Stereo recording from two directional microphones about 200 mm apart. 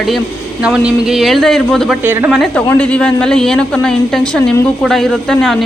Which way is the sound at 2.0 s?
10° right (ahead or behind).